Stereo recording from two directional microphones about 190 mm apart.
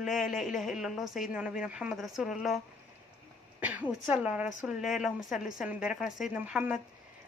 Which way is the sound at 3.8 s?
Centre (ahead or behind).